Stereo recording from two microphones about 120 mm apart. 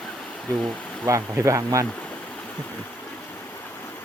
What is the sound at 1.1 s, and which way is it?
Speech, 25° right (ahead or behind).